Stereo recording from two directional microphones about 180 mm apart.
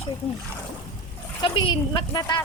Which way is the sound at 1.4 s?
25° left (ahead or behind).